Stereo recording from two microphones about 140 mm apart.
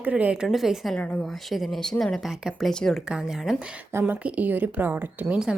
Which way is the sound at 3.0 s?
5° right (ahead or behind).